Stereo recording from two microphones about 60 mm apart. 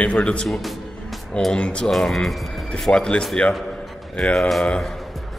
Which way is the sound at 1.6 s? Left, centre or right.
Centre.